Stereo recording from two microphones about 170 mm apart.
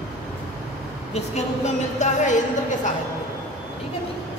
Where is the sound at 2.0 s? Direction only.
45° left (ahead or behind).